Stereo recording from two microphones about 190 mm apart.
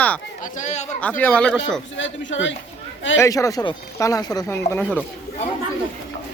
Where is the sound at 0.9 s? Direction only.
10° left (ahead or behind).